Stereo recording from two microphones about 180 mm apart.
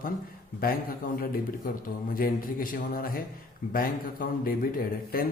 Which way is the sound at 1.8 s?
50° left (ahead or behind).